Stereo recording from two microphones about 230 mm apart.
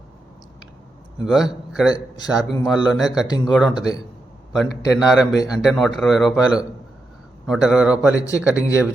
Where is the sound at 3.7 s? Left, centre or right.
Centre.